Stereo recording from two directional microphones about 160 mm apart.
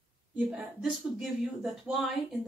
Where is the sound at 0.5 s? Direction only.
5° right (ahead or behind).